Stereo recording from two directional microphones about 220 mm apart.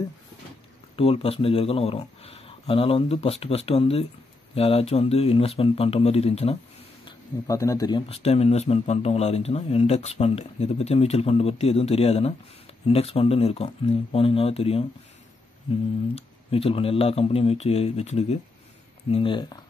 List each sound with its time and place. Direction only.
0.9 s speech: 25° left (ahead or behind)
7.1 s speech: 15° left (ahead or behind)
8.1 s speech: 30° left (ahead or behind)
16.2 s speech: 25° left (ahead or behind)